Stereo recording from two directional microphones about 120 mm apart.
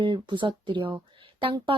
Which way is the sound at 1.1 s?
45° right (ahead or behind).